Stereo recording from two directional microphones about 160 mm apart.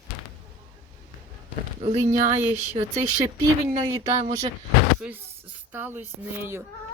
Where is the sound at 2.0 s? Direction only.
50° right (ahead or behind).